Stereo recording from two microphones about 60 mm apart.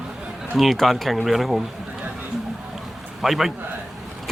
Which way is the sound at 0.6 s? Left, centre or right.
Centre.